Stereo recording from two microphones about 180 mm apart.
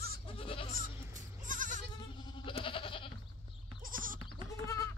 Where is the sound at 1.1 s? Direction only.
45° right (ahead or behind).